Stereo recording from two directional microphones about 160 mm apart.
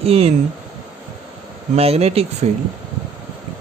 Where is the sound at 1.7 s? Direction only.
40° right (ahead or behind).